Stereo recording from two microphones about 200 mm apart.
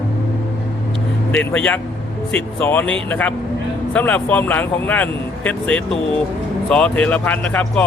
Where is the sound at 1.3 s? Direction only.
5° left (ahead or behind).